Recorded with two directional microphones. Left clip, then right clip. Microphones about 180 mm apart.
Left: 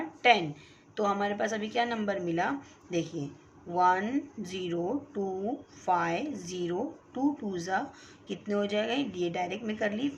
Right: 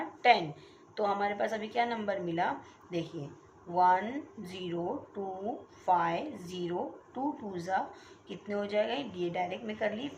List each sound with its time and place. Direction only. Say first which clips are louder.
0.2 s a woman's voice: left 1 dB; 35° left (ahead or behind)